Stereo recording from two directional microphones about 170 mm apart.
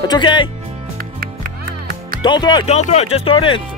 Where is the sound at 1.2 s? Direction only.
60° right (ahead or behind).